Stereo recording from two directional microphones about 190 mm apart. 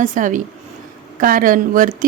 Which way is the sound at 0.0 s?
40° right (ahead or behind).